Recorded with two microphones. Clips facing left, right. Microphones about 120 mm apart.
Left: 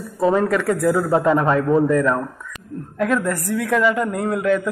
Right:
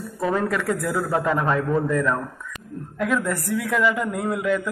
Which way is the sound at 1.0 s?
25° left (ahead or behind).